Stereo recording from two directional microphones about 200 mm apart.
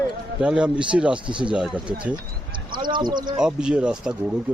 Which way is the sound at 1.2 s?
25° right (ahead or behind).